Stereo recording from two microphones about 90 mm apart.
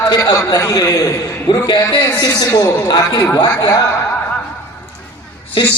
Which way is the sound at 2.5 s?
40° left (ahead or behind).